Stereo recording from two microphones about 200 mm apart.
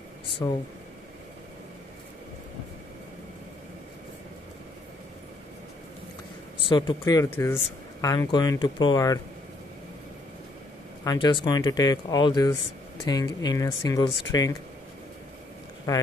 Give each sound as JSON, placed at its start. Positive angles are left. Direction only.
{"t": 0.4, "sound": "speech", "side_deg": 20}
{"t": 6.6, "sound": "speech", "side_deg": 25}
{"t": 11.1, "sound": "speech", "side_deg": 20}
{"t": 15.9, "sound": "speech", "side_deg": 15}